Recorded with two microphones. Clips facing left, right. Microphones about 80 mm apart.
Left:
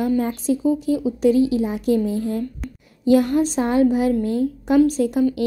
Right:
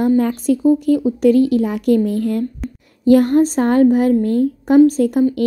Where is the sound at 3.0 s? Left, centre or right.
Right.